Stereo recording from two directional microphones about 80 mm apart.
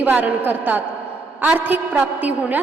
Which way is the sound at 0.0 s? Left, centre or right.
Centre.